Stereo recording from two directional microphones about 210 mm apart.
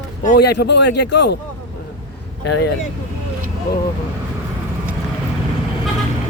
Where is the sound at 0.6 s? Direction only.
55° left (ahead or behind).